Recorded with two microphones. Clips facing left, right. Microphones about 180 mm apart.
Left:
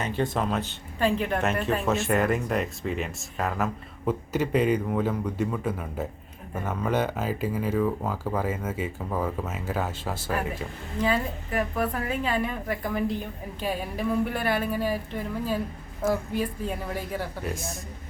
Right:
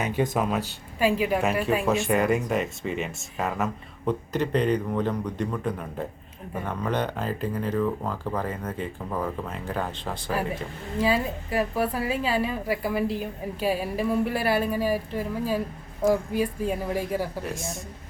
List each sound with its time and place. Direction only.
0.0 s speech: 10° right (ahead or behind)
11.7 s a woman's voice: 10° right (ahead or behind)
12.2 s a woman's voice: 30° right (ahead or behind)
12.5 s a woman's voice: 5° right (ahead or behind)